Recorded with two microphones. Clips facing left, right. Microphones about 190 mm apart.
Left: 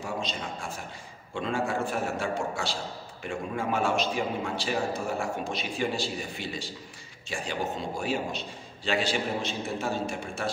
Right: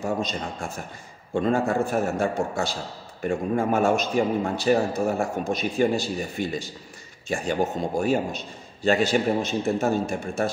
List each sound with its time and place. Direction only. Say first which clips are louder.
0.0 s a man's voice: right 6 dB; 45° right (ahead or behind)